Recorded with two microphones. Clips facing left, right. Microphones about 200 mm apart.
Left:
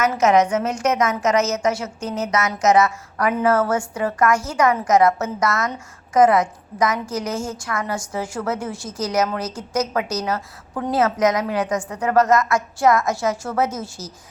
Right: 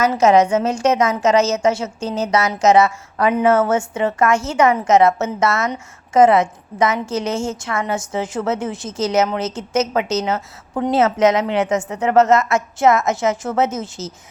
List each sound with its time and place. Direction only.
0.0 s a woman's voice: 30° right (ahead or behind)